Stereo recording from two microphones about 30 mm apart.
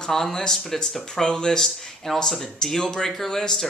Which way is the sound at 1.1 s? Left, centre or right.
Left.